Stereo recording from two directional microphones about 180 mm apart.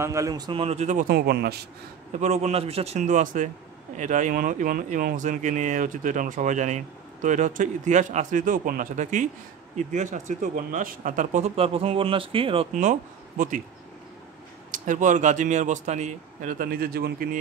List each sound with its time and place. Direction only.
0.0 s a man's voice: 15° right (ahead or behind); by 1.1 s 45° right (ahead or behind)
1.1 s a man's voice: 65° right (ahead or behind)
2.1 s speech: 40° right (ahead or behind)
3.0 s speech: 45° right (ahead or behind); by 12.6 s 30° right (ahead or behind)
14.7 s speech: 45° right (ahead or behind)